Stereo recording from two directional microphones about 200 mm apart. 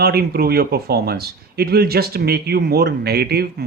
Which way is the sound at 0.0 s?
50° right (ahead or behind).